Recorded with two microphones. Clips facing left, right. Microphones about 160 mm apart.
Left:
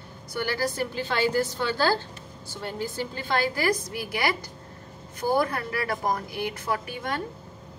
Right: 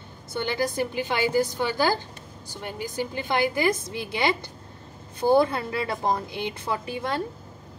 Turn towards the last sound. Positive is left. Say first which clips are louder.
# right 1 dB
turn(degrees=-30)  # may be behind; listen again after turning